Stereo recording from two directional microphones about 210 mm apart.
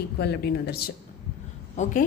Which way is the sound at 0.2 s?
50° left (ahead or behind).